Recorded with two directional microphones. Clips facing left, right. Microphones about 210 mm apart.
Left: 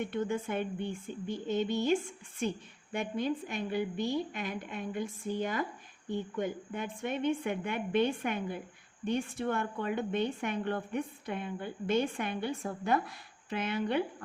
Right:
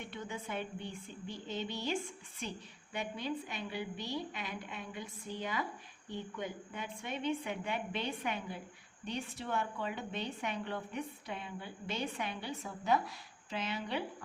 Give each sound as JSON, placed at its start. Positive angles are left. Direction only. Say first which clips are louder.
{"t": 0.0, "sound": "a woman's voice", "louder": "left 10 dB", "side_deg": 50}